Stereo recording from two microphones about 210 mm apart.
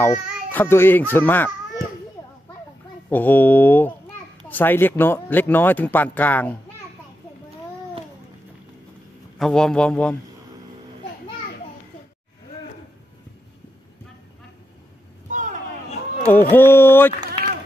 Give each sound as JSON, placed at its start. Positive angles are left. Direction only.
{"t": 0.0, "sound": "a child's voice", "side_deg": 10}
{"t": 3.1, "sound": "speech", "side_deg": 10}
{"t": 9.4, "sound": "a man's voice", "side_deg": 5}
{"t": 15.2, "sound": "vehicle", "side_deg": -40}
{"t": 16.3, "sound": "speech", "side_deg": 10}